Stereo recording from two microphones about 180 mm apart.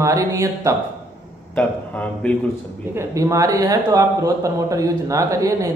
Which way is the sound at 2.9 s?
15° right (ahead or behind).